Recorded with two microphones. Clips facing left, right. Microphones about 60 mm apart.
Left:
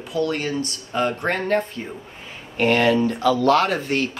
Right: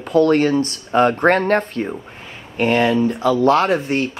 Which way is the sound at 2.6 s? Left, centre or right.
Right.